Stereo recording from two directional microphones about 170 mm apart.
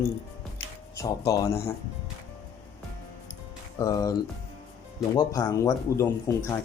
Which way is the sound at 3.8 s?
20° left (ahead or behind).